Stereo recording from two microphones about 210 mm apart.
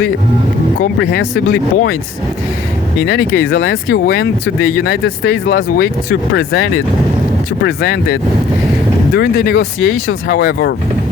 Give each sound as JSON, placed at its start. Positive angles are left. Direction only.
{"t": 0.9, "sound": "speech", "side_deg": 55}
{"t": 3.0, "sound": "speech", "side_deg": 50}
{"t": 7.6, "sound": "speech", "side_deg": 50}